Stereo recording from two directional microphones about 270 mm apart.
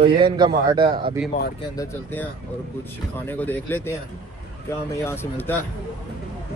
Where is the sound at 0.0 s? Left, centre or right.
Centre.